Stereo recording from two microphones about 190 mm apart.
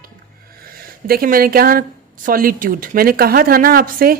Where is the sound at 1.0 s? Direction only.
50° right (ahead or behind).